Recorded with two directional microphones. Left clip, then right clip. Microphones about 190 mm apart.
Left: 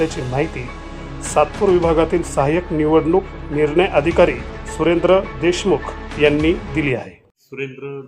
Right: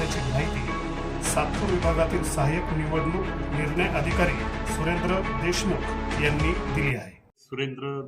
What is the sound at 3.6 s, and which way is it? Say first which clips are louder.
Speech: left 12 dB; 20° left (ahead or behind).